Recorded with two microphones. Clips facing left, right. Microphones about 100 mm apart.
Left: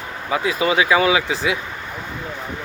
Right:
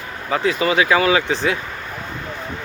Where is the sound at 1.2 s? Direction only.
5° left (ahead or behind).